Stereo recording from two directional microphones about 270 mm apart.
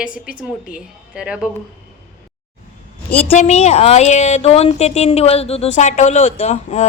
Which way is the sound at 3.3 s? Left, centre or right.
Left.